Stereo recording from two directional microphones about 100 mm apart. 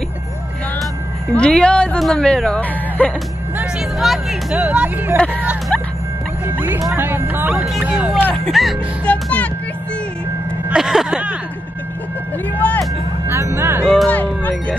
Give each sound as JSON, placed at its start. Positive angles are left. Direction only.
{"t": 1.3, "sound": "speech", "side_deg": 10}
{"t": 4.0, "sound": "speech", "side_deg": 0}
{"t": 4.6, "sound": "vehicle", "side_deg": -15}
{"t": 5.1, "sound": "speech", "side_deg": 15}
{"t": 6.4, "sound": "music", "side_deg": -20}
{"t": 7.0, "sound": "speech", "side_deg": -20}
{"t": 7.8, "sound": "vehicle", "side_deg": -15}
{"t": 8.5, "sound": "speech", "side_deg": 0}
{"t": 9.0, "sound": "speech", "side_deg": 15}
{"t": 10.7, "sound": "vehicle", "side_deg": -5}
{"t": 12.5, "sound": "speech", "side_deg": 15}
{"t": 13.3, "sound": "speech", "side_deg": -25}
{"t": 13.8, "sound": "speech", "side_deg": 5}
{"t": 14.1, "sound": "music", "side_deg": 15}